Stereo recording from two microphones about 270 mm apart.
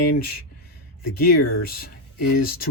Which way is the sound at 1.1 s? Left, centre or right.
Left.